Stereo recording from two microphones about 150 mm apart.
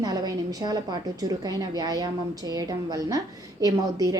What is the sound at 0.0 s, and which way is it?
A woman's voice, 25° right (ahead or behind).